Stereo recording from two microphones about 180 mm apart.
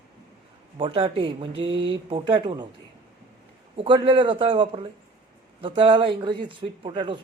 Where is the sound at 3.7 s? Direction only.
25° right (ahead or behind).